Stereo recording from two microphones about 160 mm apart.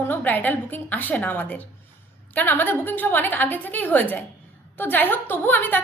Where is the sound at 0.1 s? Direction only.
10° left (ahead or behind).